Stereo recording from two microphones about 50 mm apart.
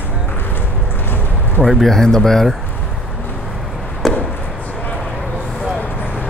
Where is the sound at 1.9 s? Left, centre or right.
Centre.